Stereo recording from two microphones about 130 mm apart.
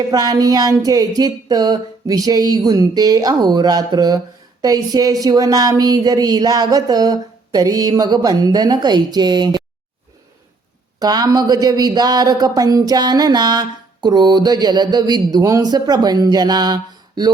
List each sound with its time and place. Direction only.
0.1 s speech: 30° right (ahead or behind)
11.0 s speech: 30° right (ahead or behind)